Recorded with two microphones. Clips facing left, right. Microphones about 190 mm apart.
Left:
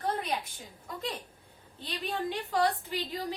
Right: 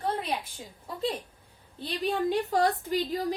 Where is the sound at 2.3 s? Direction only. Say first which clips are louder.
Right 1 dB; 40° right (ahead or behind).